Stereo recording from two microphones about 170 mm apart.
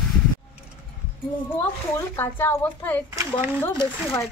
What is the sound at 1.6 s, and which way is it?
Speech, 15° left (ahead or behind).